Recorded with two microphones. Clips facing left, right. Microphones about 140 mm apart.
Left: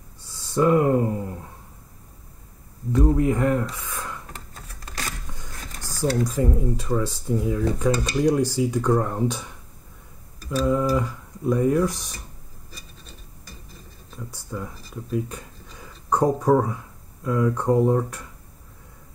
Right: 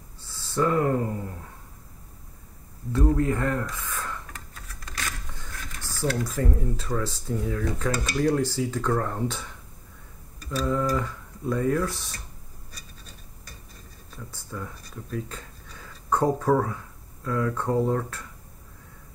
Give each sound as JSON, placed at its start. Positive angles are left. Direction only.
{"t": 0.2, "sound": "a sound", "side_deg": 15}
{"t": 2.9, "sound": "speech", "side_deg": 15}
{"t": 4.3, "sound": "typewriter", "side_deg": 30}
{"t": 5.8, "sound": "a sound", "side_deg": 40}
{"t": 6.2, "sound": "speech", "side_deg": 15}
{"t": 10.4, "sound": "speech", "side_deg": 0}
{"t": 10.7, "sound": "speech", "side_deg": 15}
{"t": 14.1, "sound": "speech", "side_deg": 15}